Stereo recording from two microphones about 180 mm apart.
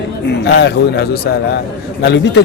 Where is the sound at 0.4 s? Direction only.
65° left (ahead or behind).